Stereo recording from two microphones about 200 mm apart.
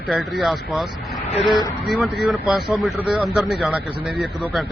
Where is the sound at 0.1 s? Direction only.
Centre (ahead or behind).